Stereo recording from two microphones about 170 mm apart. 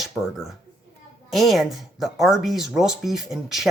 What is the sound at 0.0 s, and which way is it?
Speech, centre (ahead or behind).